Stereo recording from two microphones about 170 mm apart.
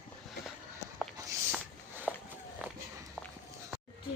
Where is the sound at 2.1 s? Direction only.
10° left (ahead or behind).